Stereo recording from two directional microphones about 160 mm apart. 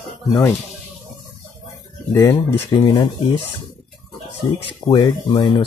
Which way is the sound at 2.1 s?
20° left (ahead or behind).